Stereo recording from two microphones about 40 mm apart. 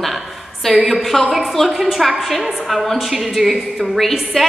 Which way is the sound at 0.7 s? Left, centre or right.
Right.